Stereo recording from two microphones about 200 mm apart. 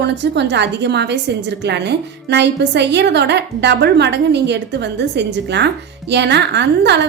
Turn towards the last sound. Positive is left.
turn(degrees=-60)  # may be behind; listen again after turning